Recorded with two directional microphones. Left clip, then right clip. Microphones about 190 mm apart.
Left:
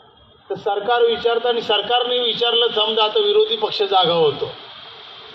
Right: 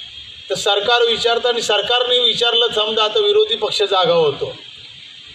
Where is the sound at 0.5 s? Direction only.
45° right (ahead or behind).